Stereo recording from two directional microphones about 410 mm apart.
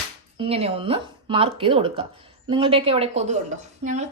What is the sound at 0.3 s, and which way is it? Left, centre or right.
A woman's voice, centre.